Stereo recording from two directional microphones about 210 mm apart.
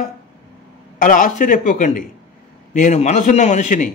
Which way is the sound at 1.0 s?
40° left (ahead or behind).